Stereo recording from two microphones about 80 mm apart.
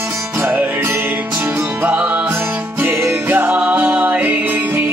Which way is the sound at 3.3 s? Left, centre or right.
Centre.